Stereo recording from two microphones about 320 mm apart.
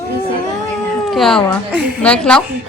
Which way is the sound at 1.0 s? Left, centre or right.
Centre.